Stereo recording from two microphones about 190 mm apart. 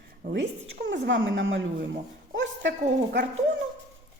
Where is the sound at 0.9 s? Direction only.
75° right (ahead or behind).